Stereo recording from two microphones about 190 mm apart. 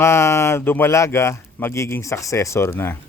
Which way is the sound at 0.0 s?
15° left (ahead or behind).